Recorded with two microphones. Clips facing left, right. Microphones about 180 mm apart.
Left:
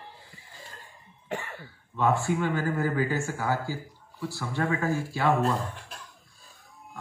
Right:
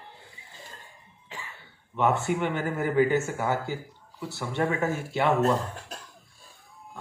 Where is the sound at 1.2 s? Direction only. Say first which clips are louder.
Left 9 dB; 60° left (ahead or behind).